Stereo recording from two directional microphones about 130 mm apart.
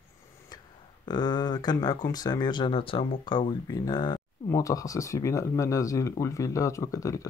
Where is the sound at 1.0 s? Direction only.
35° left (ahead or behind).